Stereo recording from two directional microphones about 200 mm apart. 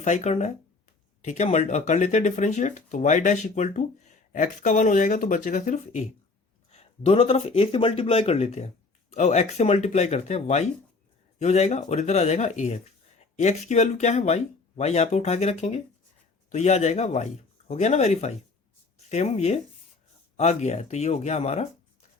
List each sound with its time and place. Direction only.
0.0 s speech: 35° left (ahead or behind)